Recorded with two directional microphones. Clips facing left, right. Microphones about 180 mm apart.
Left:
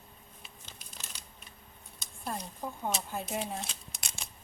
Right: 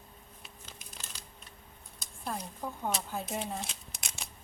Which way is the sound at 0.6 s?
Centre (ahead or behind).